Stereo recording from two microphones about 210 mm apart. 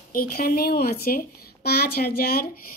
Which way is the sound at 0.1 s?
45° left (ahead or behind).